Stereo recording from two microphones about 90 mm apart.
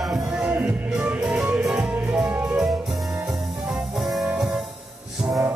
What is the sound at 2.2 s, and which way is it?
Music, 20° right (ahead or behind).